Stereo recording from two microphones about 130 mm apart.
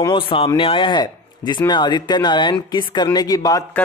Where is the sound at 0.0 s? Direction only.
40° left (ahead or behind).